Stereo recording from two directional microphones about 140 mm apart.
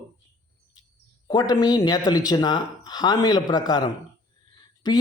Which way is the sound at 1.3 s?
30° left (ahead or behind).